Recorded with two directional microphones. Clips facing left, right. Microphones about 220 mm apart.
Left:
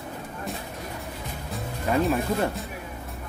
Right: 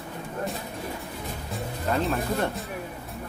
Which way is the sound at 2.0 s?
Centre (ahead or behind).